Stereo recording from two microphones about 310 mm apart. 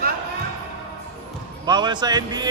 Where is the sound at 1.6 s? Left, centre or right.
Centre.